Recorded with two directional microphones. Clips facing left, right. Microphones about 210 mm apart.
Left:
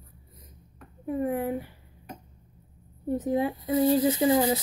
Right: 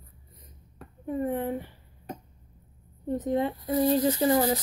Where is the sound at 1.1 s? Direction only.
10° left (ahead or behind).